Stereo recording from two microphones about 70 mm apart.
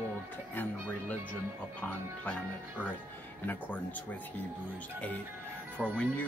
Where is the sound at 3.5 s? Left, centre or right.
Left.